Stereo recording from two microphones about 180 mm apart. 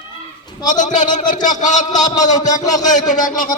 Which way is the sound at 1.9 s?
20° left (ahead or behind).